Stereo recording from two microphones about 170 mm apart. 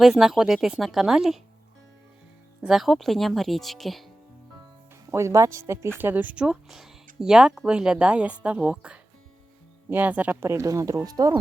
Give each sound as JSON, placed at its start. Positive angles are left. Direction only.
{"t": 0.0, "sound": "speech", "side_deg": 0}
{"t": 2.6, "sound": "speech", "side_deg": 0}
{"t": 5.1, "sound": "speech", "side_deg": -15}